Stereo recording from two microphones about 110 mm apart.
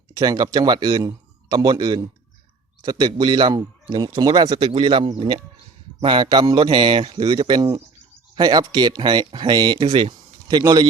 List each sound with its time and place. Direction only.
0.2 s a man's voice: 35° right (ahead or behind)